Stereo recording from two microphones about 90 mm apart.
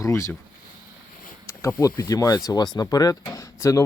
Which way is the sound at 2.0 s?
40° left (ahead or behind).